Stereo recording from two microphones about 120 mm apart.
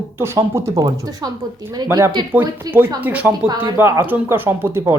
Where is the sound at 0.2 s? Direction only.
20° right (ahead or behind).